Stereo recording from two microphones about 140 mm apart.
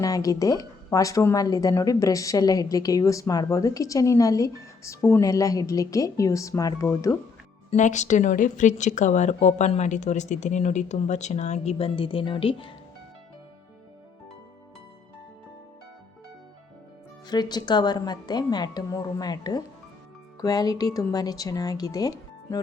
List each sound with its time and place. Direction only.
0.0 s a woman's voice: 25° left (ahead or behind)
7.7 s speech: 60° left (ahead or behind); by 12.7 s 40° left (ahead or behind)
17.2 s a woman's voice: 30° left (ahead or behind)